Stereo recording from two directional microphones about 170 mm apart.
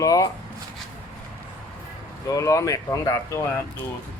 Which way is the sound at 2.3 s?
20° left (ahead or behind).